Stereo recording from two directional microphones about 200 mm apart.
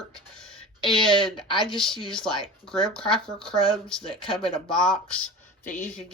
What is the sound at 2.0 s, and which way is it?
Speech, 5° left (ahead or behind).